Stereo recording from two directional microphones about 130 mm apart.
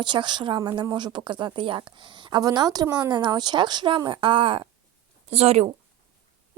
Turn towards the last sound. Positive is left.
turn(degrees=-50)  # may be behind; listen again after turning